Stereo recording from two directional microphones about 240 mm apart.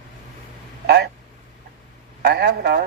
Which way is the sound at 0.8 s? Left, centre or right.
Right.